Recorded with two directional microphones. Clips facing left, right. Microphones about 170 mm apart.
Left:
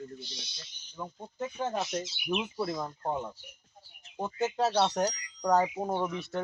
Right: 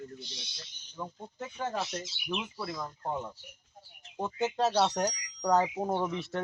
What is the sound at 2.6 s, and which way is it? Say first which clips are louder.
Speech: left 4 dB; 30° left (ahead or behind).